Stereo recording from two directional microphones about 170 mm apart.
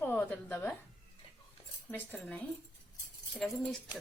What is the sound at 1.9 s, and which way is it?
Speech, 10° left (ahead or behind).